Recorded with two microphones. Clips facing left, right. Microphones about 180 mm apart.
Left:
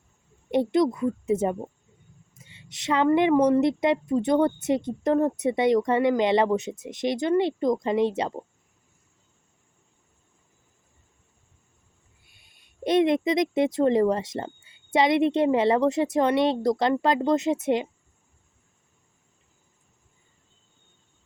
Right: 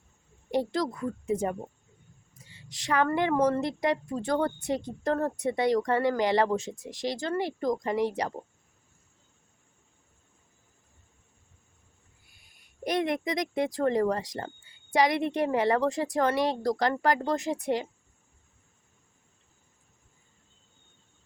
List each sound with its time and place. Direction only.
0.5 s speech: 20° left (ahead or behind)
12.8 s speech: 25° left (ahead or behind)